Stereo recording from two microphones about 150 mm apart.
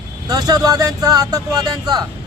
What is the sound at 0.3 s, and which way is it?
Music, 25° right (ahead or behind).